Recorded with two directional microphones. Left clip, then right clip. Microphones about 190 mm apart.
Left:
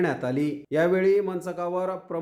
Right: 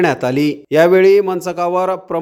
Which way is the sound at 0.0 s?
45° right (ahead or behind).